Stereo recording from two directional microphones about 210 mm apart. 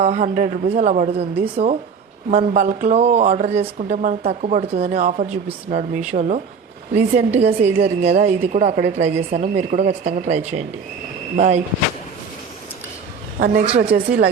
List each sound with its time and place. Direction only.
0.0 s speech: 30° right (ahead or behind)
13.4 s a woman's voice: 40° right (ahead or behind)
13.7 s speech: 30° right (ahead or behind)
13.9 s speech: 50° right (ahead or behind)